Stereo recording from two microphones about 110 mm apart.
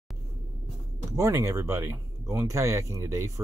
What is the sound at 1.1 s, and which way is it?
Speech, 30° right (ahead or behind).